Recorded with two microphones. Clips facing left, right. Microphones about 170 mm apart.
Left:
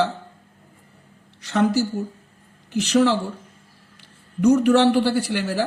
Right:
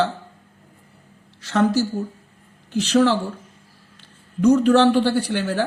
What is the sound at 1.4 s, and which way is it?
Speech, 15° left (ahead or behind).